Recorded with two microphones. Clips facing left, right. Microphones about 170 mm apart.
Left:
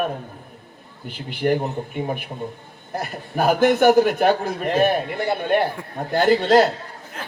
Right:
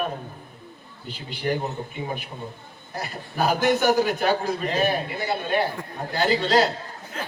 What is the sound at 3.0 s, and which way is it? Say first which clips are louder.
A man's voice: left 3 dB; 55° left (ahead or behind).